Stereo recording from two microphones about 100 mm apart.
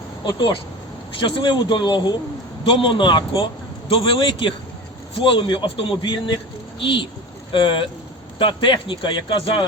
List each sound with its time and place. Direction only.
0.3 s a man's voice: 50° left (ahead or behind)